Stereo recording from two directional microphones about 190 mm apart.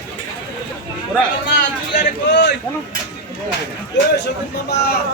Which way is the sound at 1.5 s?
65° left (ahead or behind).